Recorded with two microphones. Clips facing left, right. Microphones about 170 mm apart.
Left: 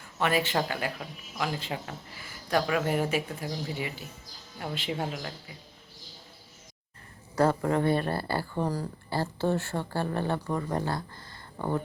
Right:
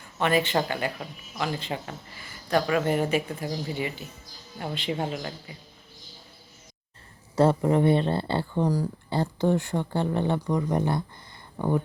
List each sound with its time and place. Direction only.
0.2 s speech: 5° left (ahead or behind)
7.3 s speech: 20° right (ahead or behind)